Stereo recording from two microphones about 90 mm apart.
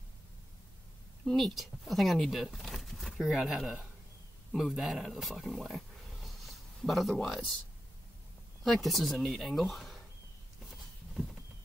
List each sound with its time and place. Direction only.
1.2 s speech: centre (ahead or behind)
8.6 s speech: centre (ahead or behind)
10.6 s a sound: centre (ahead or behind)